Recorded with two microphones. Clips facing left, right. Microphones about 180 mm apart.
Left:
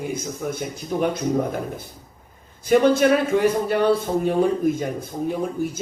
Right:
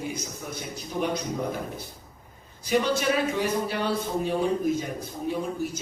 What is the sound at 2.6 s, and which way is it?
A man's voice, 50° left (ahead or behind).